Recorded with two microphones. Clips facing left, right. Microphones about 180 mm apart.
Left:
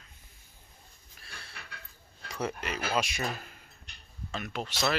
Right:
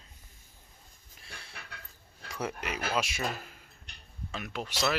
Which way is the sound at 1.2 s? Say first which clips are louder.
Even; 20° right (ahead or behind).